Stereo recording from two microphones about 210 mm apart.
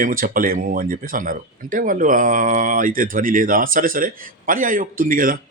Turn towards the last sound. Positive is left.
turn(degrees=-40)  # may be behind; listen again after turning